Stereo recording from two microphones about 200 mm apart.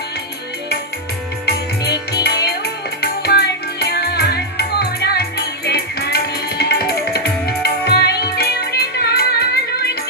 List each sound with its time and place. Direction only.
1.5 s music: 55° left (ahead or behind)